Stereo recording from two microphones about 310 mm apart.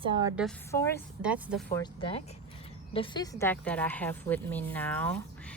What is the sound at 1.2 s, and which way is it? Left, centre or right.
Speech, centre.